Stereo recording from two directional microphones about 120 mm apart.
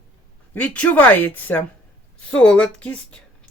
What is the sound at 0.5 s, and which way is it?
Speech, 10° left (ahead or behind).